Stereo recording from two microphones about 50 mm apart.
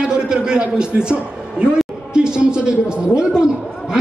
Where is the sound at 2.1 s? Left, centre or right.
Centre.